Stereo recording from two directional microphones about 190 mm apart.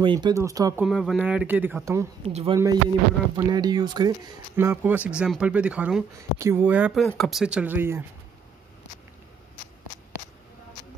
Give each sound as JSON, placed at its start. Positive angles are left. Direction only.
{"t": 0.0, "sound": "speech", "side_deg": -25}
{"t": 0.8, "sound": "speech", "side_deg": -5}
{"t": 2.2, "sound": "speech", "side_deg": -35}
{"t": 2.5, "sound": "speech", "side_deg": -20}